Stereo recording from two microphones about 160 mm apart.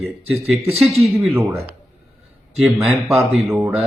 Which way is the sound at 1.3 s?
15° right (ahead or behind).